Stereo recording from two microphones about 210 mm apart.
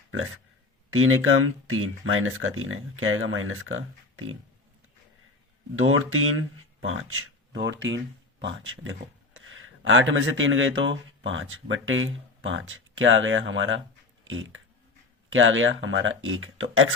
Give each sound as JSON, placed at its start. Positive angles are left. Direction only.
{"t": 0.9, "sound": "speech", "side_deg": -75}
{"t": 5.7, "sound": "speech", "side_deg": -75}